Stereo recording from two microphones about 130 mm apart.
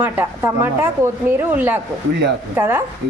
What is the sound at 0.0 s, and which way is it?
A woman's voice, 20° right (ahead or behind).